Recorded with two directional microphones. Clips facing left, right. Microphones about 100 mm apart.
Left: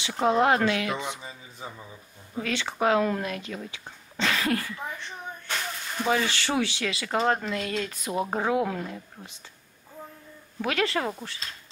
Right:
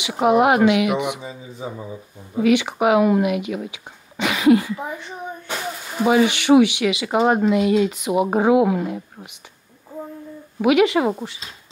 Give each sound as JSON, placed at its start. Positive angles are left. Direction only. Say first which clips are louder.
{"t": 0.0, "sound": "speech", "louder": "right 6 dB", "side_deg": -15}
{"t": 10.6, "sound": "speech", "louder": "right 11 dB", "side_deg": -15}